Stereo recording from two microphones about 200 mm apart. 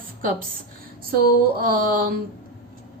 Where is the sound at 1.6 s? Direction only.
45° right (ahead or behind).